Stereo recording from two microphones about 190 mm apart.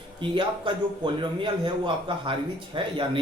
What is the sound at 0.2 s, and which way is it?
A man's voice, 25° right (ahead or behind).